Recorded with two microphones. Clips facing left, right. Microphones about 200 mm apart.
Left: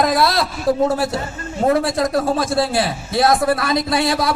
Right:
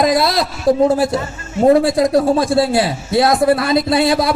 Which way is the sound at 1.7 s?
20° right (ahead or behind).